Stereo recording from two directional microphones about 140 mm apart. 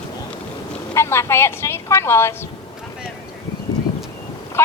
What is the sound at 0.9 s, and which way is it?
Speech, 20° left (ahead or behind).